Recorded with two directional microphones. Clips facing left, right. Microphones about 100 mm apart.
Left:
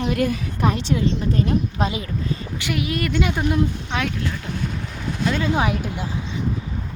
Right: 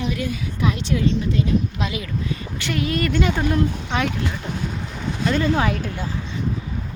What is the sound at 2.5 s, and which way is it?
Speech, 10° left (ahead or behind).